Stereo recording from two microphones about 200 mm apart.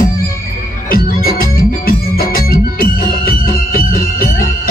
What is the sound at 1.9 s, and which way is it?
Music, 45° left (ahead or behind).